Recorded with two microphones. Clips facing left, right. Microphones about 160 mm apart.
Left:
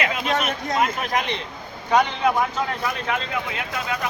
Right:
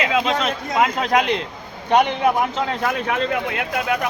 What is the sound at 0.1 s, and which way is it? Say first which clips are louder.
Speech: right 4 dB; 90° right.